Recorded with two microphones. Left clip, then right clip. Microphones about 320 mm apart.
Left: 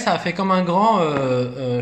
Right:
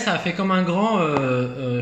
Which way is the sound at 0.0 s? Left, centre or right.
Centre.